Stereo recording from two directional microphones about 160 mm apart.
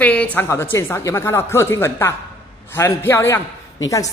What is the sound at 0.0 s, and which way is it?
A woman's voice, 10° left (ahead or behind).